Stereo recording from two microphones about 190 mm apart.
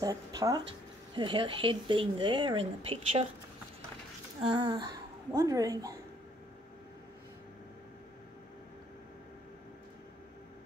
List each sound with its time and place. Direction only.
0.0 s speech: 20° right (ahead or behind)
4.6 s a woman's voice: 20° right (ahead or behind)